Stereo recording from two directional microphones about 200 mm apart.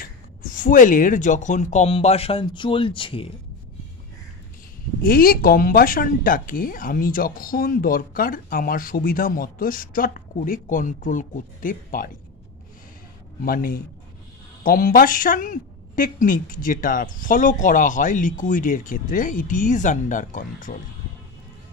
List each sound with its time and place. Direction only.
0.0 s a woman's voice: 45° left (ahead or behind); by 3.3 s 25° left (ahead or behind)
5.0 s speech: 45° left (ahead or behind)
13.4 s a woman's voice: 45° left (ahead or behind)